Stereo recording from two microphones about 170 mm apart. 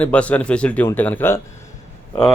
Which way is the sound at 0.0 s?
10° left (ahead or behind).